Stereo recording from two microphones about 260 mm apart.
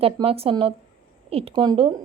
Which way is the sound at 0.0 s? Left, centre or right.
Right.